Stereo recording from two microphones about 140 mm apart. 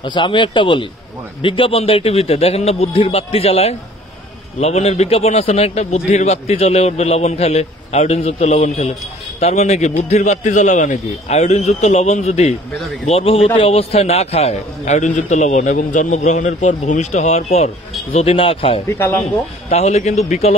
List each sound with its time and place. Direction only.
0.0 s a man's voice: 35° left (ahead or behind)
18.9 s speech: 15° left (ahead or behind)
19.7 s a man's voice: 50° left (ahead or behind)